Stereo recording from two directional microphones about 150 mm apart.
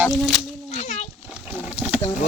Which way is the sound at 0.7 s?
50° left (ahead or behind).